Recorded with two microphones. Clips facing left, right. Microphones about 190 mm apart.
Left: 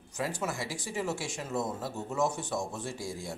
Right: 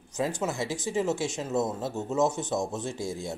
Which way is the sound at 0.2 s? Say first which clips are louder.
Right 5 dB; 20° right (ahead or behind).